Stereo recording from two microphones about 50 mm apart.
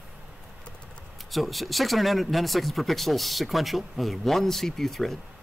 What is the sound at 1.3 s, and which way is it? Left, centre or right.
Speech, centre.